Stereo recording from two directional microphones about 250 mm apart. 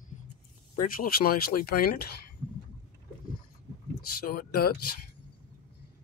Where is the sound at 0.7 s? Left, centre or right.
Left.